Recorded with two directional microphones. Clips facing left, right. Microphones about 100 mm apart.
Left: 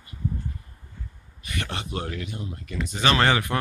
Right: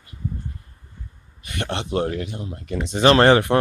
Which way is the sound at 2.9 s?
55° right (ahead or behind).